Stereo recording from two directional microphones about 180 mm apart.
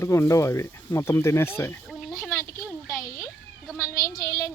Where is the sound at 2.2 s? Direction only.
15° left (ahead or behind).